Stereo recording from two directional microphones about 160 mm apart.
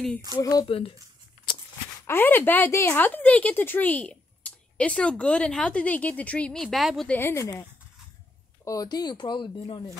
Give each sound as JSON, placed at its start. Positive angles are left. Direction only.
{"t": 0.4, "sound": "speech", "side_deg": 25}
{"t": 0.7, "sound": "speech", "side_deg": 35}
{"t": 2.0, "sound": "a woman's voice", "side_deg": 15}
{"t": 7.1, "sound": "a woman's voice", "side_deg": 15}
{"t": 8.6, "sound": "speech", "side_deg": 25}